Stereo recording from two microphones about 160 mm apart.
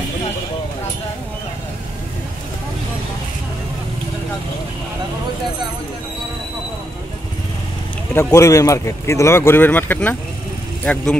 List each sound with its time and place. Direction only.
8.1 s speech: 15° left (ahead or behind)